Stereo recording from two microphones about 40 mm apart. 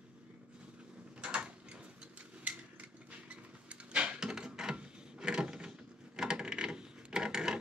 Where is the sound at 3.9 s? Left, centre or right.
Right.